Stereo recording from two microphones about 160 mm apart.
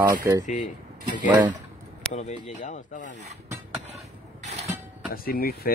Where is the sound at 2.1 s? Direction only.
45° left (ahead or behind).